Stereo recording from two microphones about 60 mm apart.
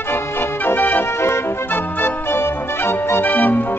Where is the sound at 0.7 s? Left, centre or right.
Left.